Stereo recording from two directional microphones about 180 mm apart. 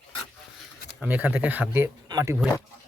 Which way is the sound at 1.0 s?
10° right (ahead or behind).